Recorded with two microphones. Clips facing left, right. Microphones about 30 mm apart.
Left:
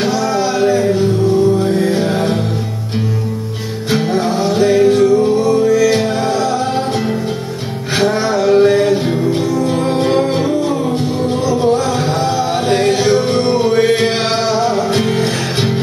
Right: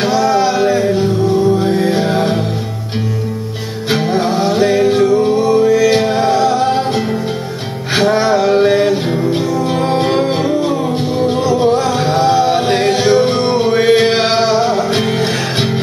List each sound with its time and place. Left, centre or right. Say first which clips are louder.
0.0 s music: right 3 dB; centre
3.9 s music: right 1 dB; centre
8.0 s music: right 2 dB; centre